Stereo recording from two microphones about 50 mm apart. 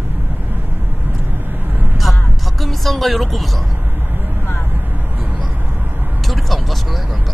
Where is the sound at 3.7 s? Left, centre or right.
Right.